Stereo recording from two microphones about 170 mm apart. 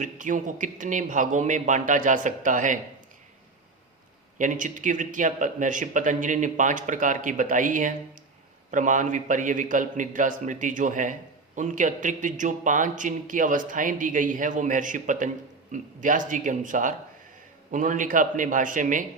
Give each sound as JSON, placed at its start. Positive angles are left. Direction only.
{"t": 0.0, "sound": "a man's voice", "side_deg": -50}
{"t": 4.4, "sound": "a man's voice", "side_deg": -50}